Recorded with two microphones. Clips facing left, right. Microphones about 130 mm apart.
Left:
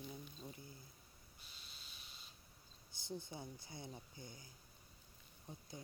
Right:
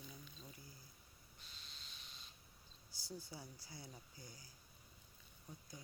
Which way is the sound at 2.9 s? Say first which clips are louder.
Left 4 dB; 20° left (ahead or behind).